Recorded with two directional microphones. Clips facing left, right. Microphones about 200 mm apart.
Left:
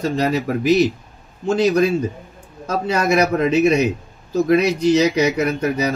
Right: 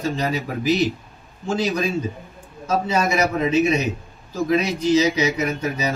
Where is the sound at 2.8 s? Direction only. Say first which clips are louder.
Left 6 dB; 65° left (ahead or behind).